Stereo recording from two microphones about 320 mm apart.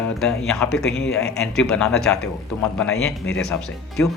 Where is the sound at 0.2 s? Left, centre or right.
Centre.